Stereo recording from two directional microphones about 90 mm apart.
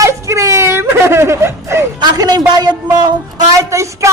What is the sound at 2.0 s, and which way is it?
Speech, 50° right (ahead or behind).